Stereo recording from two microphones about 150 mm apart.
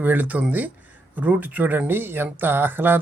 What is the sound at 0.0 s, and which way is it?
Speech, 10° right (ahead or behind).